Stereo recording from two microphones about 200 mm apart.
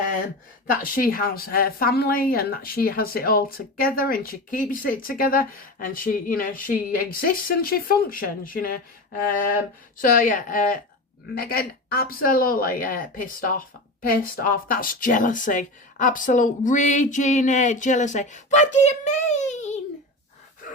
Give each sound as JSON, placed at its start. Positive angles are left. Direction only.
{"t": 0.7, "sound": "a woman's voice", "side_deg": 45}
{"t": 10.0, "sound": "a woman's voice", "side_deg": 40}